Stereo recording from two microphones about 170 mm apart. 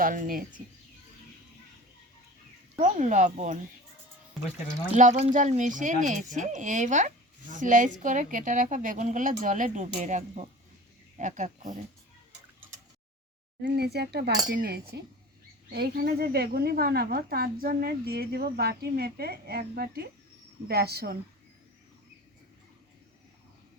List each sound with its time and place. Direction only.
0.0 s a woman's voice: 55° right (ahead or behind)
2.7 s a woman's voice: 45° right (ahead or behind)
4.9 s a woman's voice: 40° right (ahead or behind)
13.6 s a sound: 70° right (ahead or behind)
14.5 s speech: 65° right (ahead or behind)
20.7 s a sound: 70° right (ahead or behind)